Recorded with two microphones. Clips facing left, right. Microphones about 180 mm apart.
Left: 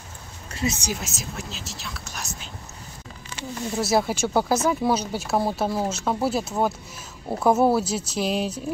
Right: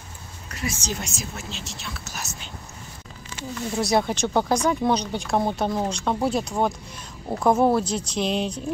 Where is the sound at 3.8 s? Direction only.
5° left (ahead or behind).